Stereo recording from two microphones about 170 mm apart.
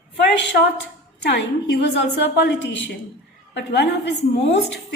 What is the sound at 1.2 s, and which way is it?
A woman's voice, 85° left.